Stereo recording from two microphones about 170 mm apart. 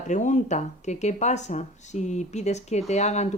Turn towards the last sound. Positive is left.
turn(degrees=40)  # may be behind; listen again after turning